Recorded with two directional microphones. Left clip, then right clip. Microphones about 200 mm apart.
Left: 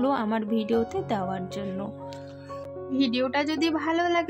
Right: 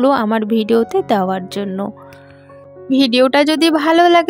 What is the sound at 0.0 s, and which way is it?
Speech, 50° right (ahead or behind).